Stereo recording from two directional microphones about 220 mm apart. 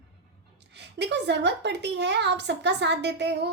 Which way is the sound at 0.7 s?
50° right (ahead or behind).